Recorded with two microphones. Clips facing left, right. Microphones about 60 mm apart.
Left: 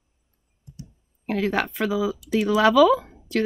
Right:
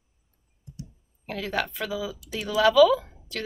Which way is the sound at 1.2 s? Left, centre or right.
Left.